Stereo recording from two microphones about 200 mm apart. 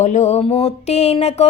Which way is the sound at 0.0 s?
35° left (ahead or behind).